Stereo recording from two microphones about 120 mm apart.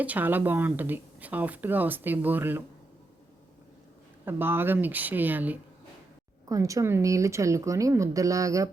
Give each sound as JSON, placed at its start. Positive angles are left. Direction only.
{"t": 0.0, "sound": "speech", "side_deg": -15}
{"t": 4.3, "sound": "speech", "side_deg": -20}
{"t": 6.5, "sound": "speech", "side_deg": -30}